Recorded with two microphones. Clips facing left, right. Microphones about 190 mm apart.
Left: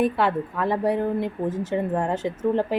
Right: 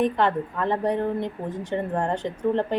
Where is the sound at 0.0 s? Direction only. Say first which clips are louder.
Even; 5° left (ahead or behind).